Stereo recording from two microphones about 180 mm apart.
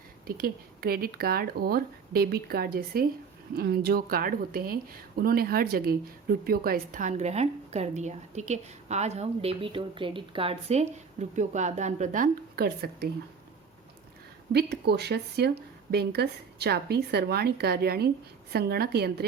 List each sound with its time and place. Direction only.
0.3 s speech: 55° right (ahead or behind)
14.5 s speech: 65° right (ahead or behind)